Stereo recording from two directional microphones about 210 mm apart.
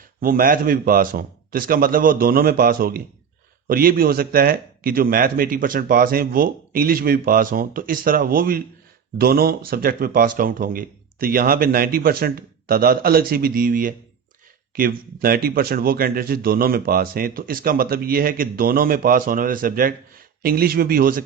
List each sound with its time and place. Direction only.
0.2 s speech: 40° right (ahead or behind)